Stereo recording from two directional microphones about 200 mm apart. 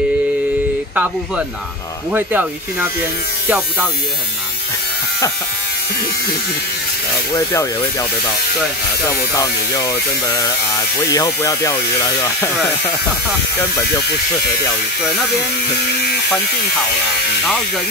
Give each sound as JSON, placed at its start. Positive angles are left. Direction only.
{"t": 0.9, "sound": "speech", "side_deg": -5}
{"t": 9.4, "sound": "speech", "side_deg": 15}